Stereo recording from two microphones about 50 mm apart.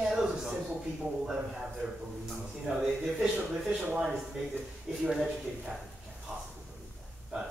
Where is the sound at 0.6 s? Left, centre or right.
Centre.